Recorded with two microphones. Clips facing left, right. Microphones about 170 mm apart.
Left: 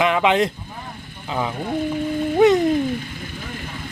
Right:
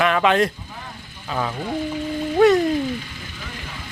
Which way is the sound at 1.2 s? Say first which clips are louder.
Left 1 dB; 15° left (ahead or behind).